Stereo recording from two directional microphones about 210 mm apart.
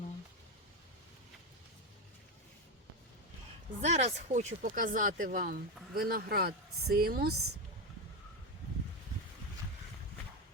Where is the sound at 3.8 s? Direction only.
30° right (ahead or behind); by 7.3 s 45° right (ahead or behind).